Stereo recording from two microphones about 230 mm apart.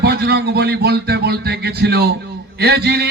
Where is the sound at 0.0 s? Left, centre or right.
Right.